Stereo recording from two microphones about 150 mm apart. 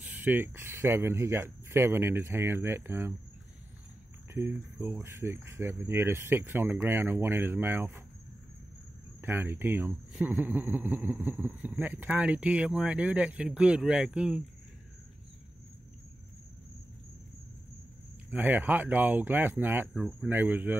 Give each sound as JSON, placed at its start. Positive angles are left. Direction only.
{"t": 0.0, "sound": "speech", "side_deg": -10}
{"t": 4.3, "sound": "speech", "side_deg": -15}
{"t": 9.2, "sound": "speech", "side_deg": -15}
{"t": 18.3, "sound": "speech", "side_deg": -10}
{"t": 19.9, "sound": "speech", "side_deg": 0}
{"t": 20.2, "sound": "speech", "side_deg": -10}